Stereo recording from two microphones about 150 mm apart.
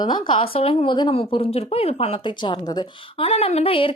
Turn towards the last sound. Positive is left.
turn(degrees=40)  # may be behind; listen again after turning